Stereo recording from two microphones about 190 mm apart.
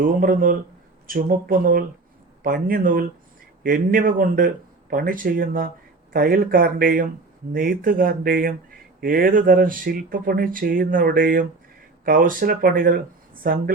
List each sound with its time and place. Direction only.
0.0 s speech: 45° right (ahead or behind)